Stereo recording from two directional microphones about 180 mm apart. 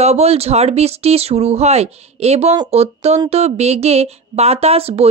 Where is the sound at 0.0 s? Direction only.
35° right (ahead or behind).